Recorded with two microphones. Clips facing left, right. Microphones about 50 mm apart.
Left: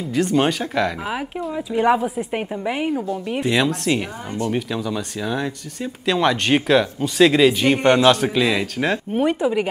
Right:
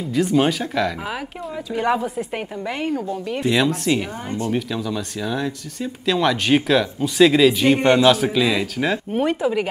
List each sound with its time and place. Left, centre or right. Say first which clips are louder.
0.1 s a woman's voice: even; centre
8.3 s speech: even; centre